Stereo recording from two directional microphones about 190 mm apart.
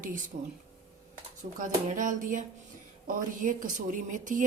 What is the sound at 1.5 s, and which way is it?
A woman's voice, 40° right (ahead or behind).